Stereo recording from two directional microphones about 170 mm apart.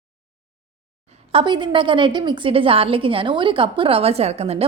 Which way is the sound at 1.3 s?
25° right (ahead or behind).